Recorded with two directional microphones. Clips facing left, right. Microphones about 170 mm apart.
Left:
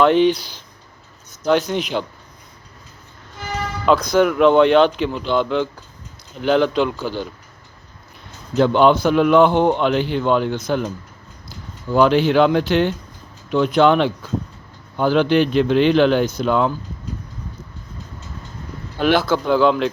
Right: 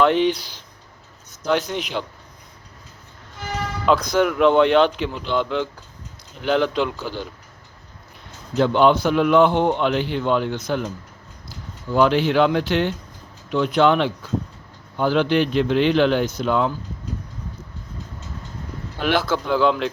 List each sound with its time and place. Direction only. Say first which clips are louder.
0.0 s a man's voice: left 3 dB; 35° left (ahead or behind)
1.5 s a man's voice: left 4 dB; 35° left (ahead or behind)
3.8 s a man's voice: left 3 dB; 45° left (ahead or behind)
8.5 s a man's voice: left 2 dB; 45° left (ahead or behind)
11.9 s a man's voice: left 3 dB; 35° left (ahead or behind)
18.9 s a man's voice: left 4 dB; 35° left (ahead or behind)